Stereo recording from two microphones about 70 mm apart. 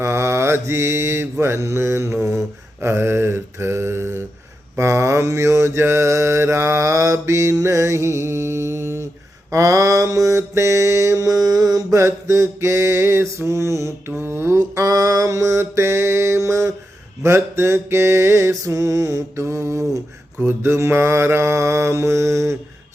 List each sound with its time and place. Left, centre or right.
0.0 s mantra: right
12.0 s mantra: right